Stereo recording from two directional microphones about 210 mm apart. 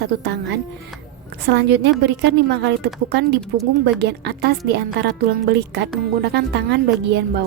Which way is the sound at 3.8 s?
50° right (ahead or behind).